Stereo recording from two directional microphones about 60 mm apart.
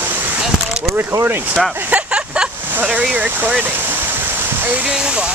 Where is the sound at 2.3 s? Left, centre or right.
Centre.